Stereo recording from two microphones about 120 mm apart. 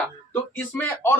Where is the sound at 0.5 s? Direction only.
15° left (ahead or behind).